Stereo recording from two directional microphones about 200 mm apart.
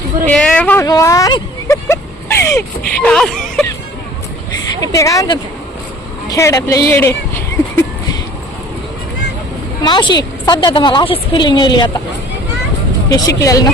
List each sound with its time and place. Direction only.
0.3 s speech: 5° left (ahead or behind)
0.9 s a sound: 15° left (ahead or behind)
3.0 s speech: 5° left (ahead or behind)
4.8 s speech: 15° left (ahead or behind)
9.8 s a woman's voice: 20° left (ahead or behind)
13.1 s speech: 15° left (ahead or behind)